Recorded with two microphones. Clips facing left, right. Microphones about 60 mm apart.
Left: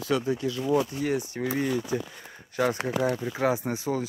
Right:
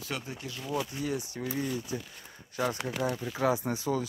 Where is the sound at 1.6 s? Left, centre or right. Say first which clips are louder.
Left 7 dB; left.